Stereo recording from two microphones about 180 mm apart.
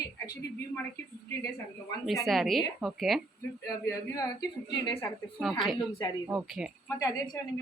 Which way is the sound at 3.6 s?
20° left (ahead or behind).